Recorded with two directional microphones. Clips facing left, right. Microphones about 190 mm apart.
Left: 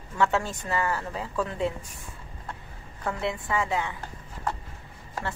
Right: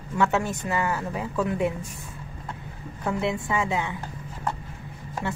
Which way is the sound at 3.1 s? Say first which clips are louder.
Right 3 dB; 20° right (ahead or behind).